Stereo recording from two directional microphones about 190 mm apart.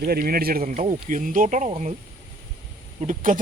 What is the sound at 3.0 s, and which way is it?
Speech, 45° right (ahead or behind).